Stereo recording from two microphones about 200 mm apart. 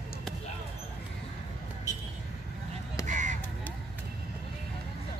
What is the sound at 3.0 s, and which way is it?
Honk, 40° right (ahead or behind).